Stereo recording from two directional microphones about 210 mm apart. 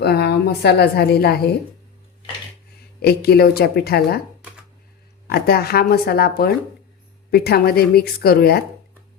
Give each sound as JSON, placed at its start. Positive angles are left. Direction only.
{"t": 0.0, "sound": "a woman's voice", "side_deg": 50}
{"t": 3.0, "sound": "a woman's voice", "side_deg": 50}
{"t": 5.3, "sound": "a woman's voice", "side_deg": 45}